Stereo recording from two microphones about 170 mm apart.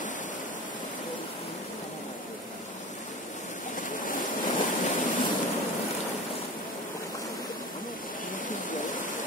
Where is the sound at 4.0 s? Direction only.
50° left (ahead or behind).